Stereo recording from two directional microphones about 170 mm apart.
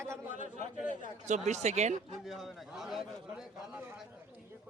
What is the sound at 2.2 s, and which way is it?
A man's voice, centre (ahead or behind).